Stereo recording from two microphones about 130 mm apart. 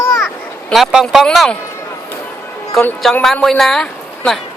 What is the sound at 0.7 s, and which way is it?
Speech, centre (ahead or behind).